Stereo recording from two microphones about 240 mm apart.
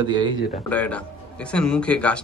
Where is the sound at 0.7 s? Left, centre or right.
Centre.